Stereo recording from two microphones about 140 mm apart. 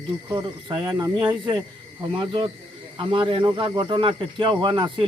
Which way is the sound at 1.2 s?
35° right (ahead or behind).